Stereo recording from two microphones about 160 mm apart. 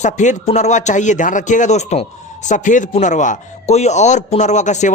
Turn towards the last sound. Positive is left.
turn(degrees=50)  # may be behind; listen again after turning